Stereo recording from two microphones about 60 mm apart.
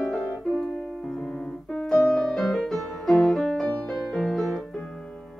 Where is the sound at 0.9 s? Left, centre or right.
Centre.